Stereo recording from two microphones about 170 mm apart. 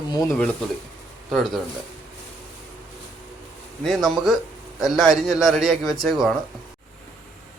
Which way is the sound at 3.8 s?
Centre (ahead or behind).